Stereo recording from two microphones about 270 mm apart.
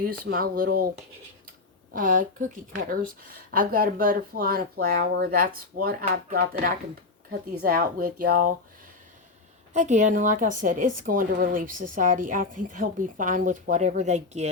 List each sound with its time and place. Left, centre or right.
0.0 s speech: right
9.7 s a woman's voice: right